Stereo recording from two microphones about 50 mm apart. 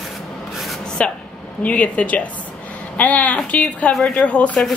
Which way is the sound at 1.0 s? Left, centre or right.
Left.